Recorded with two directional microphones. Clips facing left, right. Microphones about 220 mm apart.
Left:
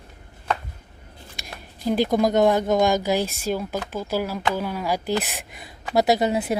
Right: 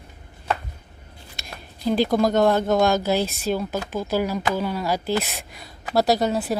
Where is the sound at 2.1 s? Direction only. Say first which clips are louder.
Left 1 dB; 20° left (ahead or behind).